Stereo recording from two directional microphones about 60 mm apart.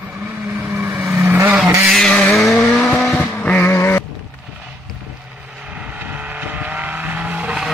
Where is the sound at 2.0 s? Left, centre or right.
Centre.